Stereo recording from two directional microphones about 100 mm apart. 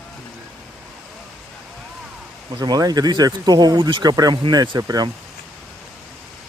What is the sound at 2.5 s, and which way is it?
Speech, 40° right (ahead or behind).